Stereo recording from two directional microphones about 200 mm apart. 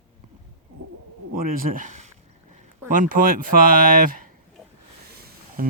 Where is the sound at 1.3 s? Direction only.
45° right (ahead or behind).